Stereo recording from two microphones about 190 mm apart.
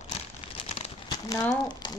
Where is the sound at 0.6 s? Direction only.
30° left (ahead or behind).